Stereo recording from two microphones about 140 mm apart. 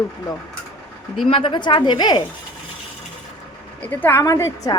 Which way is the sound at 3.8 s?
10° left (ahead or behind).